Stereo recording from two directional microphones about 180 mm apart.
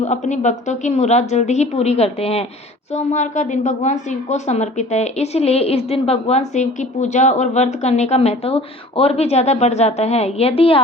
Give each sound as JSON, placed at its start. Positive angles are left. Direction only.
{"t": 0.0, "sound": "a woman's voice", "side_deg": 40}